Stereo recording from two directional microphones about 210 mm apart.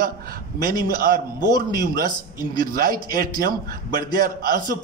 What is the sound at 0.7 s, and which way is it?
Speech, 45° right (ahead or behind).